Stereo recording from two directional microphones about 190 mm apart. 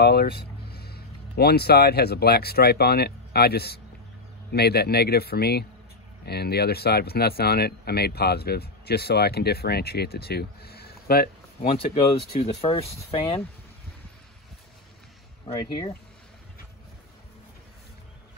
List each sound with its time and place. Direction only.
0.0 s speech: 55° left (ahead or behind)
11.8 s speech: 30° left (ahead or behind)